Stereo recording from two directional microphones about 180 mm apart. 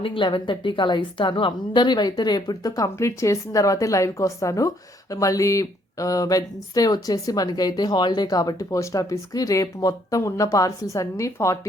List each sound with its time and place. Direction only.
0.0 s a woman's voice: 30° left (ahead or behind)